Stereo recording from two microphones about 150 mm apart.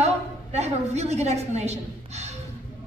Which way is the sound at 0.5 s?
50° right (ahead or behind).